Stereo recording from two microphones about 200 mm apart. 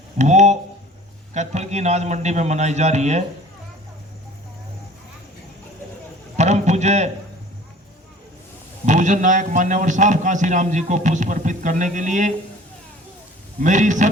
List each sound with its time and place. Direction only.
0.2 s a man's voice: 35° right (ahead or behind)
6.3 s a sound: 35° right (ahead or behind)
8.9 s a man's voice: 40° right (ahead or behind)
13.6 s a man's voice: 40° right (ahead or behind)